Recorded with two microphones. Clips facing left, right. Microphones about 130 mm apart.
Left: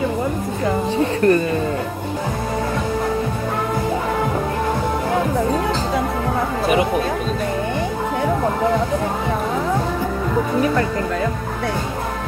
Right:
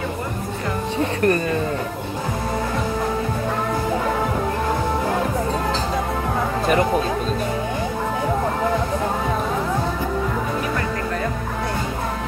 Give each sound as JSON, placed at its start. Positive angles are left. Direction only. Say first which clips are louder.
{"t": 1.2, "sound": "speech", "louder": "left 4 dB", "side_deg": 30}